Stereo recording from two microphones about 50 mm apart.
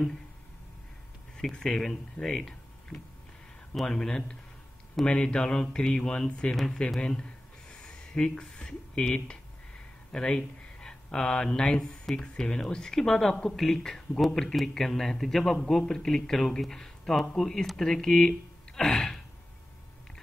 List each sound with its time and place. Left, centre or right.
1.3 s speech: centre
6.5 s speech: centre
7.0 s a sound: centre
10.1 s speech: centre